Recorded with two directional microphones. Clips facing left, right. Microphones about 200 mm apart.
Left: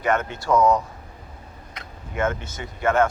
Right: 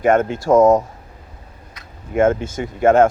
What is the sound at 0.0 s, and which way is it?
Speech, 50° right (ahead or behind).